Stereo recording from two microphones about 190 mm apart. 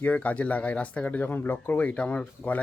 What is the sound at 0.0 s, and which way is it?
Speech, 10° left (ahead or behind).